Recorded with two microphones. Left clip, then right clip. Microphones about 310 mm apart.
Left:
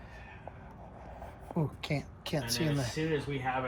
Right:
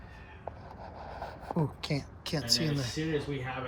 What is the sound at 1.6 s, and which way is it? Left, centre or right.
Speech, centre.